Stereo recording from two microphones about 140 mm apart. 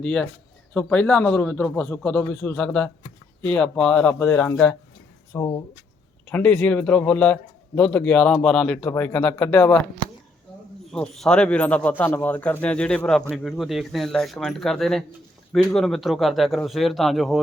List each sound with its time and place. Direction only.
0.0 s a man's voice: 5° left (ahead or behind)
4.3 s speech: 20° left (ahead or behind)
4.5 s a man's voice: 10° left (ahead or behind)
5.3 s speech: 25° left (ahead or behind)
6.2 s a man's voice: 10° left (ahead or behind)
10.9 s a man's voice: 5° left (ahead or behind)